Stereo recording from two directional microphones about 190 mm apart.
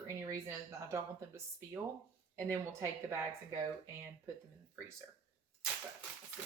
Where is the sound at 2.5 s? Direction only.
15° right (ahead or behind).